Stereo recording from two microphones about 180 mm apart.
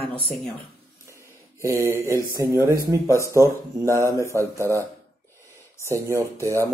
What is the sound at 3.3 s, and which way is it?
Speech, 15° right (ahead or behind).